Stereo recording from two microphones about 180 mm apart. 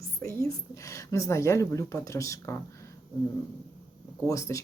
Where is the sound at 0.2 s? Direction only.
15° left (ahead or behind).